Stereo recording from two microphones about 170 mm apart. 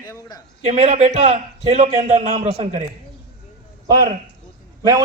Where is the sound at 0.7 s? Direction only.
40° right (ahead or behind).